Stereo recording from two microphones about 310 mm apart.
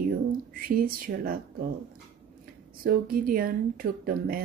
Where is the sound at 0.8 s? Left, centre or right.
Right.